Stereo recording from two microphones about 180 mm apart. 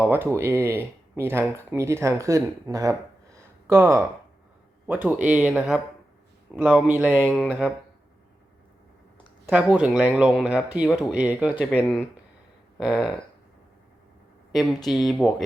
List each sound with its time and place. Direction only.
0.1 s speech: 10° right (ahead or behind)
3.3 s a sound: 15° right (ahead or behind)
4.9 s speech: 10° right (ahead or behind)
7.3 s speech: 5° left (ahead or behind)
9.5 s speech: 5° right (ahead or behind)
11.7 s speech: 10° left (ahead or behind)
14.5 s speech: centre (ahead or behind)